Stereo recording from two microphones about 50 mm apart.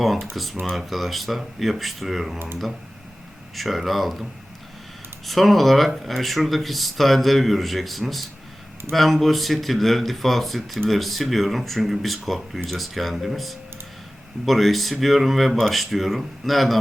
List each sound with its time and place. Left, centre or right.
0.0 s speech: centre
3.5 s speech: centre